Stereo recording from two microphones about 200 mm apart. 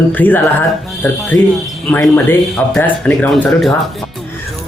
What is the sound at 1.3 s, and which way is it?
Speech, 70° left (ahead or behind).